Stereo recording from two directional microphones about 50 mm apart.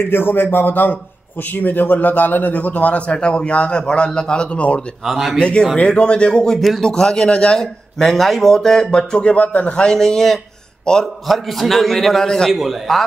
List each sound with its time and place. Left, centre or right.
0.1 s a man's voice: left
5.0 s speech: centre
5.4 s a man's voice: left
7.6 s speech: centre
8.9 s a man's voice: centre
9.8 s speech: centre
11.2 s a man's voice: centre